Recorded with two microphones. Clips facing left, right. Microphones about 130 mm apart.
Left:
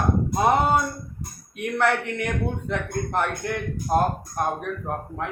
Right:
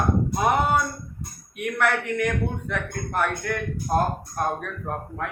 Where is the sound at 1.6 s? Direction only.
30° left (ahead or behind).